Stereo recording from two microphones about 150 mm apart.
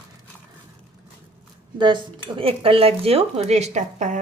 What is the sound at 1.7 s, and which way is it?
Speech, 30° right (ahead or behind).